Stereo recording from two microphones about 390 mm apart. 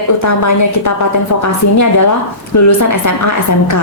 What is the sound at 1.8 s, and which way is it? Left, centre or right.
A woman's voice, left.